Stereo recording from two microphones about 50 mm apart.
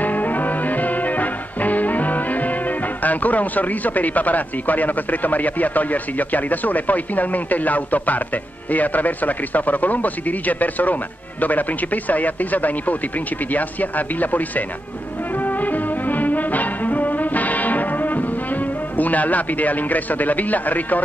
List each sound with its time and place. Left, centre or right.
0.0 s music: left
3.0 s speech: left
15.3 s music: left